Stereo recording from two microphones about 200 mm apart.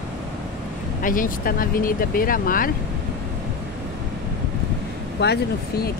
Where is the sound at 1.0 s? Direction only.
45° left (ahead or behind).